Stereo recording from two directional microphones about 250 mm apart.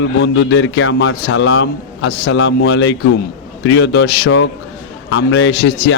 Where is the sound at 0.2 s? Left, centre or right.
Left.